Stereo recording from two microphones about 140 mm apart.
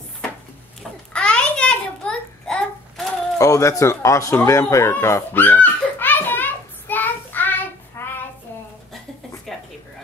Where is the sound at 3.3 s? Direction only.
20° left (ahead or behind).